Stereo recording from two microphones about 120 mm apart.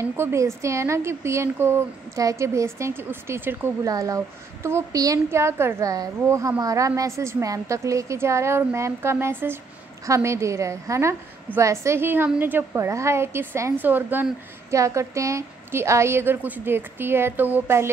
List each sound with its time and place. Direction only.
0.0 s a woman's voice: 25° right (ahead or behind)